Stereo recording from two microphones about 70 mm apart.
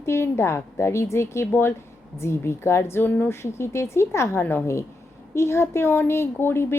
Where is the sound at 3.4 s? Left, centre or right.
Left.